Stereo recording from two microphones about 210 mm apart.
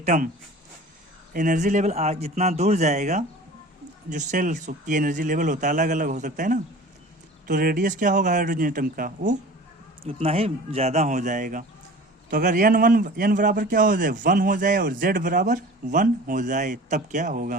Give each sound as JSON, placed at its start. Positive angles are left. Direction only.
{"t": 0.0, "sound": "speech", "side_deg": -35}
{"t": 1.3, "sound": "a man's voice", "side_deg": -35}
{"t": 10.0, "sound": "a man's voice", "side_deg": -30}